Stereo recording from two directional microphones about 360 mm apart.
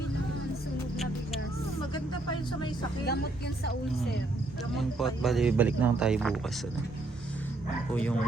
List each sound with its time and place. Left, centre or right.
4.8 s speech: centre
7.9 s speech: centre